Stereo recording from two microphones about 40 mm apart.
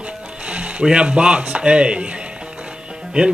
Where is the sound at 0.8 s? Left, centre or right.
Right.